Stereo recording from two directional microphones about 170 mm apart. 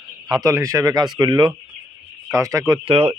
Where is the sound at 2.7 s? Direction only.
30° right (ahead or behind).